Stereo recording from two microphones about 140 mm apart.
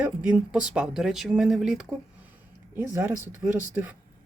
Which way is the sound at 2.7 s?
15° right (ahead or behind).